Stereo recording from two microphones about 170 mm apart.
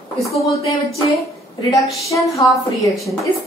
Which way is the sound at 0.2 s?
Centre (ahead or behind).